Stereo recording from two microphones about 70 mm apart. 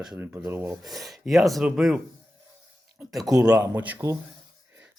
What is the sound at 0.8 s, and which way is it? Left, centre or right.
Speech, centre.